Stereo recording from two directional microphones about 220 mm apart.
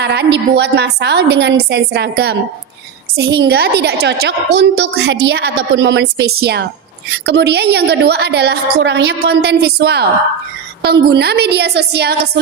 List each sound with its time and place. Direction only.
0.0 s a woman's voice: 50° right (ahead or behind)